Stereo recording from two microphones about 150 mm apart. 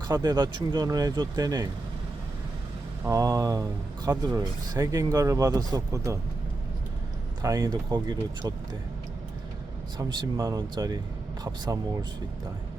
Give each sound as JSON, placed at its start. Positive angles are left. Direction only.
{"t": 0.1, "sound": "speech", "side_deg": -30}
{"t": 3.0, "sound": "speech", "side_deg": -20}
{"t": 7.4, "sound": "speech", "side_deg": -20}
{"t": 7.7, "sound": "speech", "side_deg": -30}
{"t": 10.0, "sound": "speech", "side_deg": -25}